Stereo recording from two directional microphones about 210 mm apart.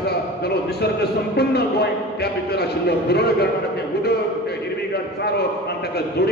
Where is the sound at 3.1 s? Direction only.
50° left (ahead or behind).